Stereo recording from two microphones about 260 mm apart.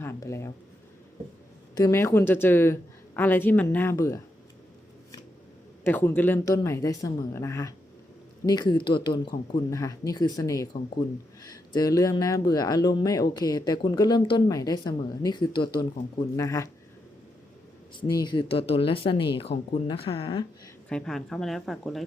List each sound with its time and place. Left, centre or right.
0.0 s speech: centre
1.7 s speech: centre
5.8 s speech: centre
18.2 s speech: centre
20.9 s speech: centre